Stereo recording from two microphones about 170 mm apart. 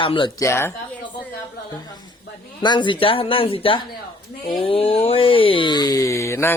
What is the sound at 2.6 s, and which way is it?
Speech, 25° left (ahead or behind).